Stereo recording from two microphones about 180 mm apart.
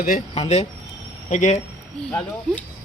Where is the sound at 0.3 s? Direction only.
35° left (ahead or behind).